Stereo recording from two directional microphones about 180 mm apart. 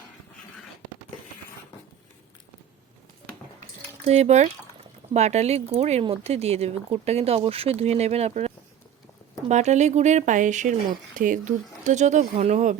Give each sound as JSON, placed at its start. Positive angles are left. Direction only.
{"t": 4.0, "sound": "speech", "side_deg": -40}